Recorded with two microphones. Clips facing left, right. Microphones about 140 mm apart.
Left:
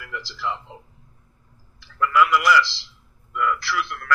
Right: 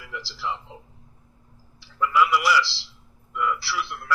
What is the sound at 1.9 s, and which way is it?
A man's voice, 10° right (ahead or behind).